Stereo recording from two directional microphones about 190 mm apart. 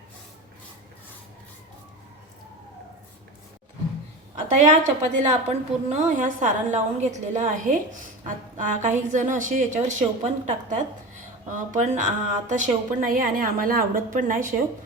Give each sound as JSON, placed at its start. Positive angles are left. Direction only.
{"t": 4.5, "sound": "a woman's voice", "side_deg": -40}